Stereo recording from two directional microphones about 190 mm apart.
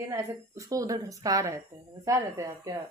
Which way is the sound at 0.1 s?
15° right (ahead or behind).